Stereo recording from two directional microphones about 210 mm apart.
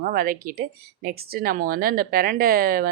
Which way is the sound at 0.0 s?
45° right (ahead or behind).